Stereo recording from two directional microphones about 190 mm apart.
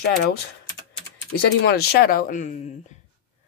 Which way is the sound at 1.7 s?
55° left (ahead or behind).